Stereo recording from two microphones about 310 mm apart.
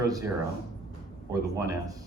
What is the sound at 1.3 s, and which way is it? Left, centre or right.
Speech, centre.